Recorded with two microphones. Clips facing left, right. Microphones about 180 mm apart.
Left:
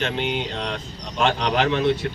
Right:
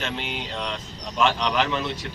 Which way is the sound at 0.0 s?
50° left (ahead or behind).